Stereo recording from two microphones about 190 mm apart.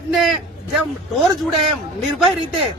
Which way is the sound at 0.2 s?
Centre (ahead or behind).